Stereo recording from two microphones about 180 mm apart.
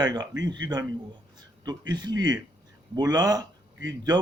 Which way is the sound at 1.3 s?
20° right (ahead or behind).